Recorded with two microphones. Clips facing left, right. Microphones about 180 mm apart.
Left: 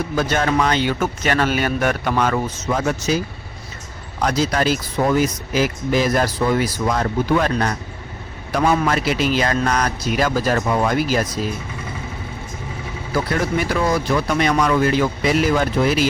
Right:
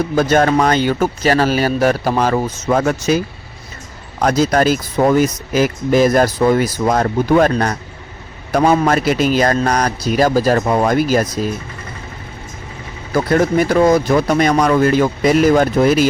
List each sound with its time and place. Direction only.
0.2 s a man's voice: 45° right (ahead or behind)
2.6 s speech: 55° right (ahead or behind)
4.2 s a man's voice: 45° right (ahead or behind)
13.1 s speech: 45° right (ahead or behind)